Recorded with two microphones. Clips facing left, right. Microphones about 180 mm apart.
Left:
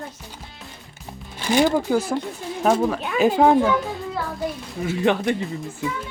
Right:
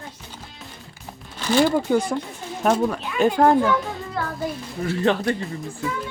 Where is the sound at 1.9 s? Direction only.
5° left (ahead or behind).